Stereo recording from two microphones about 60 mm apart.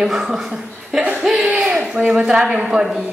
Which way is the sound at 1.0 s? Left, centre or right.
Right.